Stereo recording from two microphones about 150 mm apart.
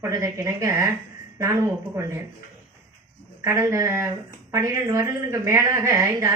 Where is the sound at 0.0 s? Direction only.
20° right (ahead or behind).